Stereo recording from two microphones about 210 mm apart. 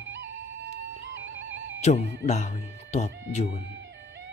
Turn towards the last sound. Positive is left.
turn(degrees=35)  # may be behind; listen again after turning